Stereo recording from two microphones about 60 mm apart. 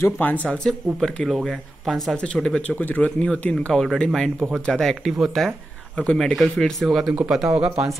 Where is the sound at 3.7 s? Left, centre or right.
Centre.